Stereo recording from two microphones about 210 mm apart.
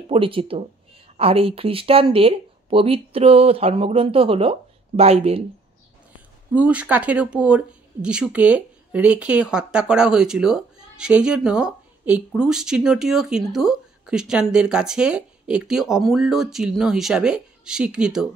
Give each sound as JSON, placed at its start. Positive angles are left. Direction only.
{"t": 0.1, "sound": "speech", "side_deg": -25}
{"t": 6.5, "sound": "speech", "side_deg": -5}